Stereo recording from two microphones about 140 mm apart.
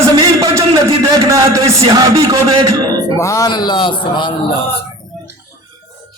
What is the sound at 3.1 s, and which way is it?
Speech, 20° left (ahead or behind).